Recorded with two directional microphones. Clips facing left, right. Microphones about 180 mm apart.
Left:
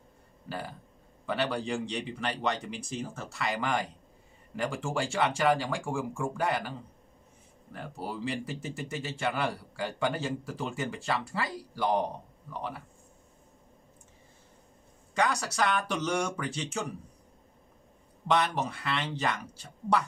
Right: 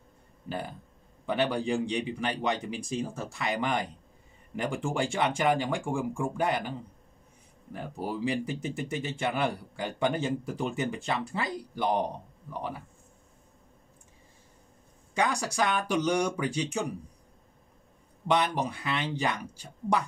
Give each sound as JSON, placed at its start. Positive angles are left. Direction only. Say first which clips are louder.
{"t": 0.5, "sound": "a man's voice", "louder": "right 3 dB", "side_deg": -20}
{"t": 8.0, "sound": "speech", "louder": "right 4 dB", "side_deg": -15}
{"t": 15.1, "sound": "a man's voice", "louder": "right 1 dB", "side_deg": -15}
{"t": 18.2, "sound": "a man's voice", "louder": "right 1 dB", "side_deg": -15}